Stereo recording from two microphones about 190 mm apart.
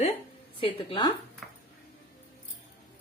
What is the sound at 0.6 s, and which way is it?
Speech, 25° left (ahead or behind).